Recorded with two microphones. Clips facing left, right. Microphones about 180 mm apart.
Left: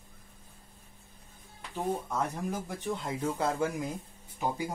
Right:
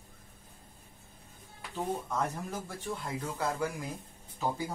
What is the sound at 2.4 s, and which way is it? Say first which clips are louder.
Speech: left 4 dB; 15° left (ahead or behind).